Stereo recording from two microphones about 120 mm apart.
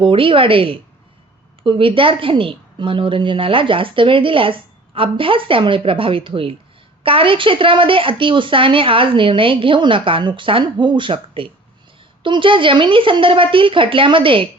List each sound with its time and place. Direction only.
0.0 s a woman's voice: 45° right (ahead or behind)